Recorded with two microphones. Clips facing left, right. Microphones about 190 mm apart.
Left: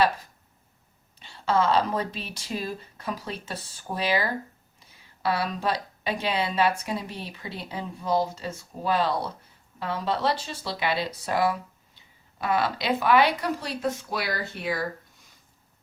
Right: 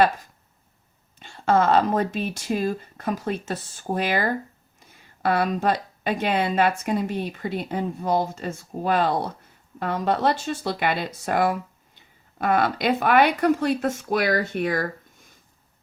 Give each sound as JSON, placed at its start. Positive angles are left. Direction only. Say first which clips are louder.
{"t": 1.2, "sound": "speech", "louder": "right 4 dB", "side_deg": -50}